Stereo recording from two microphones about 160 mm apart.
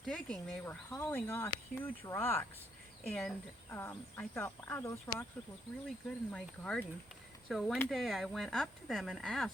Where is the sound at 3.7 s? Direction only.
15° left (ahead or behind).